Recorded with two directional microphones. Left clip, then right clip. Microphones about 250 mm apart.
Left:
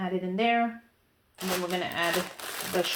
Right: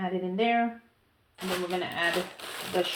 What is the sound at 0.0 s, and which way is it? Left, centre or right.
Speech, left.